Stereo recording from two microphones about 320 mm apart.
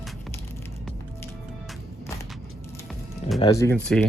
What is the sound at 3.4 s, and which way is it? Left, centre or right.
Speech, centre.